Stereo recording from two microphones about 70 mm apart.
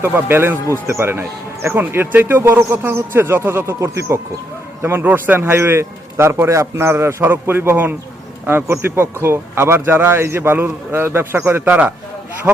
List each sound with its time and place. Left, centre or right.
0.0 s speech: right